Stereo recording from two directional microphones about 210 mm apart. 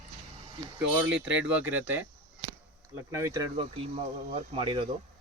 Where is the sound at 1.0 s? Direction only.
5° right (ahead or behind).